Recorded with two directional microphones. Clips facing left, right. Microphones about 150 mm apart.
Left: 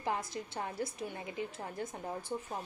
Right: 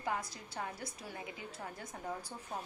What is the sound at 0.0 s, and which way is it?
A woman's voice, 25° left (ahead or behind).